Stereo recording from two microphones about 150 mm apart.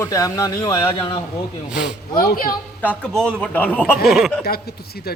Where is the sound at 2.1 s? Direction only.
75° left (ahead or behind).